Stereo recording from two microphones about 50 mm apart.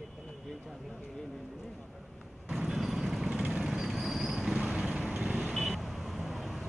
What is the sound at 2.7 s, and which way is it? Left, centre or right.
Vehicle, centre.